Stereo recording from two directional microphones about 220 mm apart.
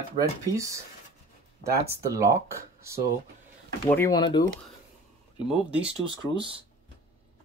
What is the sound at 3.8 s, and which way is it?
Speech, 10° left (ahead or behind).